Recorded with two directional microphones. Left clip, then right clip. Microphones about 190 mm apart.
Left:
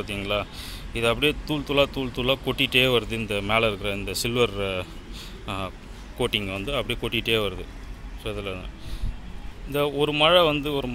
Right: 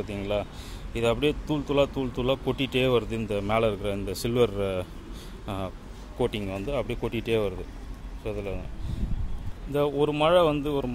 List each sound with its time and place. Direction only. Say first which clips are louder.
0.0 s speech: left 2 dB; 10° right (ahead or behind)
9.7 s speech: left 1 dB; 10° right (ahead or behind)